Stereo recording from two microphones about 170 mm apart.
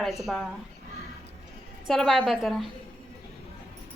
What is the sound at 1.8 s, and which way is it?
Speech, centre (ahead or behind).